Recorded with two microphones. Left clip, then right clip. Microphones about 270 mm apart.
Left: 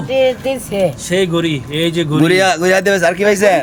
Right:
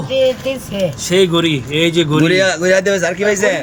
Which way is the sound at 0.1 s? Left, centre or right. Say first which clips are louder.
Left 1 dB; centre.